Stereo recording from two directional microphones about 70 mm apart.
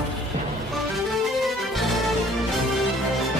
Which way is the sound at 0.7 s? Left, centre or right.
Centre.